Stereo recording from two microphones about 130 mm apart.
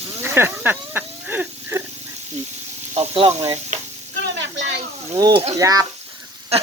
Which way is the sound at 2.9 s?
50° right (ahead or behind).